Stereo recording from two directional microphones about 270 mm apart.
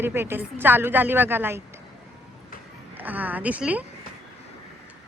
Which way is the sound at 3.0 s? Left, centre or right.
Centre.